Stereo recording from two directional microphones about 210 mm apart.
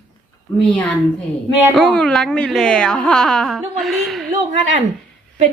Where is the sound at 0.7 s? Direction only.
5° left (ahead or behind).